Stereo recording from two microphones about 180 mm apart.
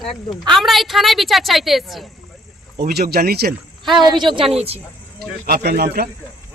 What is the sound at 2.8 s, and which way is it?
Speech, 60° right (ahead or behind).